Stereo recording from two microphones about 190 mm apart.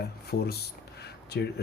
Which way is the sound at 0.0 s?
55° left (ahead or behind).